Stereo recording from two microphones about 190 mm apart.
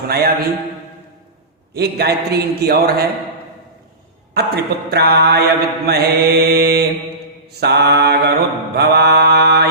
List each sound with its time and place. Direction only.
0.1 s mantra: 55° right (ahead or behind)
1.7 s mantra: 60° right (ahead or behind)
4.4 s mantra: 60° right (ahead or behind)